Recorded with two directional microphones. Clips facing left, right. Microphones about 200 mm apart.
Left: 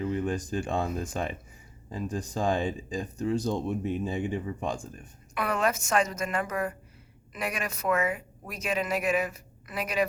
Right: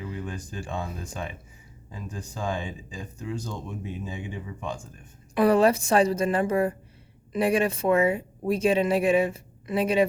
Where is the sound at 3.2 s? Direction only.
35° left (ahead or behind).